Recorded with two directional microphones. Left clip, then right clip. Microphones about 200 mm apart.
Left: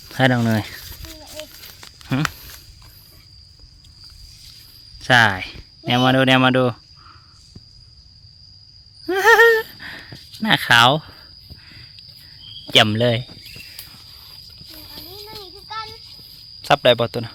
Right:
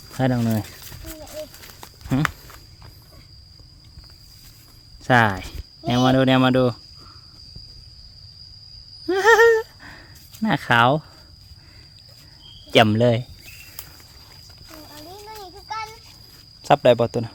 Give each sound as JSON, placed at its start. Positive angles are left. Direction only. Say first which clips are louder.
{"t": 0.2, "sound": "speech", "louder": "left 5 dB", "side_deg": 15}
{"t": 1.4, "sound": "horse", "louder": "right 1 dB", "side_deg": 0}
{"t": 2.0, "sound": "walk", "louder": "even", "side_deg": 0}
{"t": 5.0, "sound": "speech", "louder": "left 3 dB", "side_deg": -5}
{"t": 9.0, "sound": "a sound", "louder": "left 2 dB", "side_deg": 0}
{"t": 10.4, "sound": "speech", "louder": "left 4 dB", "side_deg": 0}
{"t": 12.7, "sound": "speech", "louder": "left 1 dB", "side_deg": -10}
{"t": 15.6, "sound": "child singing", "louder": "right 1 dB", "side_deg": -5}
{"t": 16.6, "sound": "speech", "louder": "left 1 dB", "side_deg": -10}